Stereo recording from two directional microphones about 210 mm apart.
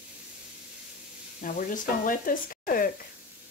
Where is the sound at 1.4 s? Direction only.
40° left (ahead or behind).